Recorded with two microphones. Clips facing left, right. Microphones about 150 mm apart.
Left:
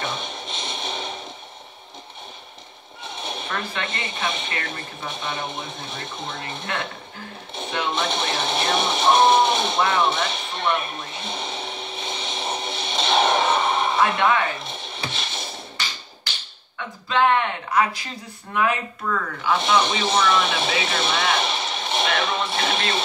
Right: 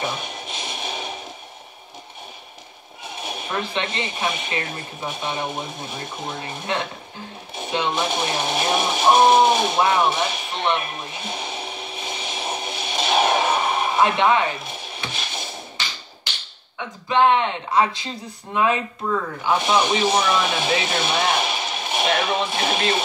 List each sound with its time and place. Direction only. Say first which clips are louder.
0.0 s music: right 2 dB; 5° right (ahead or behind)
3.0 s horse: even; 5° right (ahead or behind)
3.7 s speech: right 4 dB; 25° right (ahead or behind)
4.1 s speech: right 2 dB; 5° right (ahead or behind)
7.9 s a sound: right 1 dB; 5° right (ahead or behind)
14.0 s speech: right 3 dB; 20° right (ahead or behind)
14.6 s music: even; 5° right (ahead or behind)
16.7 s speech: right 3 dB; 20° right (ahead or behind)
19.8 s speech: right 2 dB; 5° right (ahead or behind)
21.4 s a sound: even; 5° right (ahead or behind)
22.2 s speech: right 2 dB; 5° right (ahead or behind)